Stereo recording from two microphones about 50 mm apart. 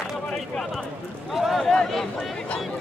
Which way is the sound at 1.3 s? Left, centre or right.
Centre.